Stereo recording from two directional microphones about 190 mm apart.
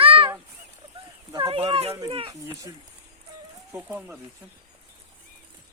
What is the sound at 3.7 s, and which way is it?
Speech, 10° right (ahead or behind).